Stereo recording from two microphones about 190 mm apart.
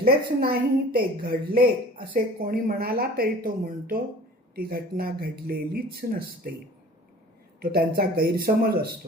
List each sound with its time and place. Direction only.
0.0 s a woman's voice: 55° right (ahead or behind)
7.6 s speech: 55° right (ahead or behind)